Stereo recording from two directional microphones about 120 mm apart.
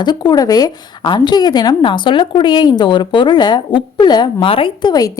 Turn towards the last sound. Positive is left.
turn(degrees=35)  # may be behind; listen again after turning